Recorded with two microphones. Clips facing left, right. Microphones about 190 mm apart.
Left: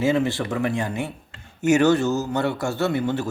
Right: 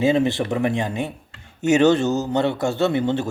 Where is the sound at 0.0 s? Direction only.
20° right (ahead or behind).